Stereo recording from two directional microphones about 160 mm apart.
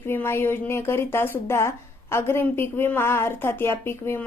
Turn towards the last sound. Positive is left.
turn(degrees=15)  # may be behind; listen again after turning